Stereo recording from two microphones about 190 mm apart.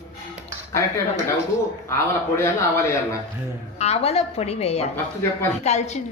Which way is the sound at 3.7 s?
35° left (ahead or behind).